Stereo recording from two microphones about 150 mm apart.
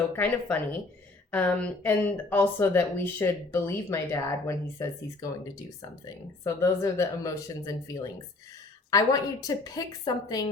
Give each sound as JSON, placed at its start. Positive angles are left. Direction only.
{"t": 0.1, "sound": "speech", "side_deg": 10}
{"t": 6.4, "sound": "speech", "side_deg": 20}